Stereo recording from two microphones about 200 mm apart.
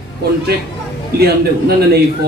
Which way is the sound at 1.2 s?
50° right (ahead or behind).